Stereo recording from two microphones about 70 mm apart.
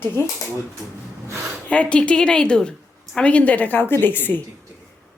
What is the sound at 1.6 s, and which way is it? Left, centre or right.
A woman's voice, centre.